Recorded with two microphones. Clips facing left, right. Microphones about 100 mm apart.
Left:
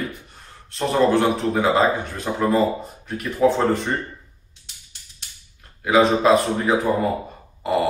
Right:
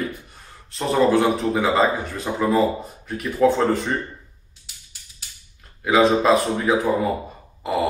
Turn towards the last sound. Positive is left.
turn(degrees=0)  # may be behind; listen again after turning